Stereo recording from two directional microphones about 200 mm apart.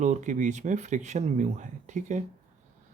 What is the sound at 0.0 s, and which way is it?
Speech, 35° right (ahead or behind).